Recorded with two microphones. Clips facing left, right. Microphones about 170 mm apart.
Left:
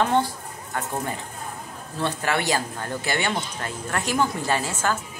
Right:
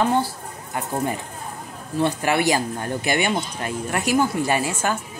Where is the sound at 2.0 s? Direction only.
15° right (ahead or behind).